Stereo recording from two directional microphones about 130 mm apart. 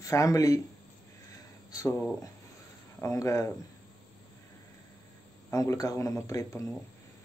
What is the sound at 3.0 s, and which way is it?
Speech, 25° left (ahead or behind).